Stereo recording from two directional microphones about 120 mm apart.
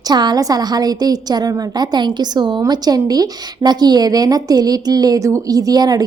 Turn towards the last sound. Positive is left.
turn(degrees=-30)  # may be behind; listen again after turning